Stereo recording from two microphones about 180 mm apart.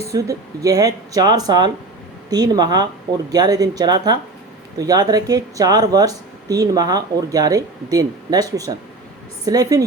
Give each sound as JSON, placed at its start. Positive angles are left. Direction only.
{"t": 0.0, "sound": "speech", "side_deg": -20}